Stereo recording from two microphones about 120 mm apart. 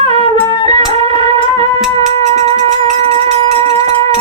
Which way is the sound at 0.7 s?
55° right (ahead or behind).